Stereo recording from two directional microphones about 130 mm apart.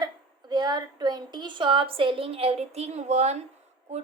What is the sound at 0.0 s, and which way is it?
A woman's voice, 35° right (ahead or behind).